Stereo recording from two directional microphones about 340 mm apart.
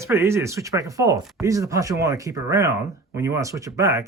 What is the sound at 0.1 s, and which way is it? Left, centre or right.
Speech, centre.